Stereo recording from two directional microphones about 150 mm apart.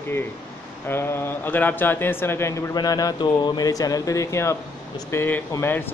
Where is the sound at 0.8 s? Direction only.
15° left (ahead or behind).